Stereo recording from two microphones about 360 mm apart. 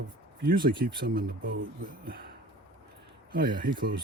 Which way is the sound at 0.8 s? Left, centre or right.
Right.